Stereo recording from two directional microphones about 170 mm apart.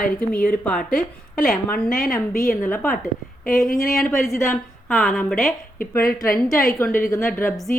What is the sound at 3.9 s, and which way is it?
A woman's voice, centre (ahead or behind).